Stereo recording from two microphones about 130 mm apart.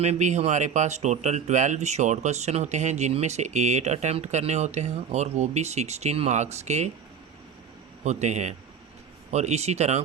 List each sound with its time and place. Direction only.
0.0 s speech: 60° right (ahead or behind)
8.0 s speech: 60° right (ahead or behind)